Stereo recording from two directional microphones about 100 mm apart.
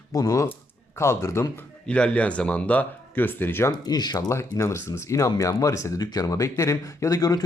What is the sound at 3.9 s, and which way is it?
Speech, 45° left (ahead or behind).